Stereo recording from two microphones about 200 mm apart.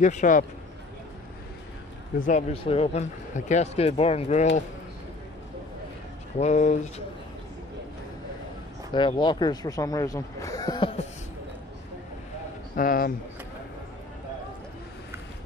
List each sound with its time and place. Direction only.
0.0 s speech: 40° left (ahead or behind)
2.2 s speech: 30° left (ahead or behind)
6.3 s speech: 35° left (ahead or behind)
8.9 s speech: 25° left (ahead or behind)
12.7 s speech: 45° left (ahead or behind)